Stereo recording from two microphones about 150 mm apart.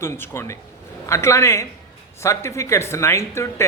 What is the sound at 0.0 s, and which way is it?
A man's voice, 15° left (ahead or behind).